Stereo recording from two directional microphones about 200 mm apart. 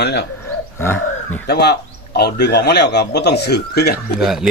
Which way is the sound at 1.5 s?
55° left (ahead or behind).